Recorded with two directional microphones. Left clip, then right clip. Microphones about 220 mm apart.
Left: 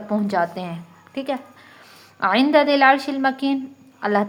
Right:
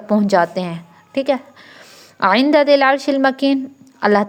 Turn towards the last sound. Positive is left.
turn(degrees=-30)  # may be behind; listen again after turning